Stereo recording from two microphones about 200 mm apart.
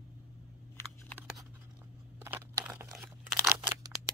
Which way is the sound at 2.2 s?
15° right (ahead or behind).